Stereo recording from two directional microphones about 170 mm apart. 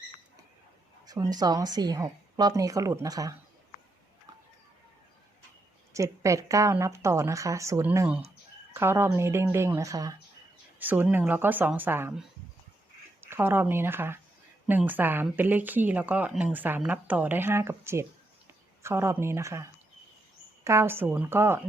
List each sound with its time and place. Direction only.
1.0 s a woman's voice: 20° right (ahead or behind)
5.9 s speech: 20° right (ahead or behind)
13.2 s speech: 15° right (ahead or behind)
20.7 s speech: 15° right (ahead or behind)